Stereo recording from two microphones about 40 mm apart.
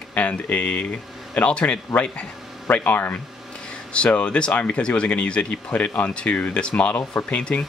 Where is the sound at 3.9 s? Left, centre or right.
Left.